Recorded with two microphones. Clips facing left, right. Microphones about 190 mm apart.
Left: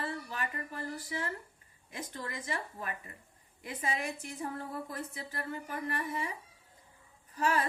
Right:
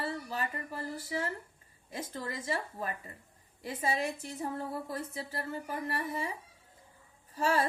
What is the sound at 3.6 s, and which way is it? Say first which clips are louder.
A woman's voice: right 3 dB; 30° right (ahead or behind).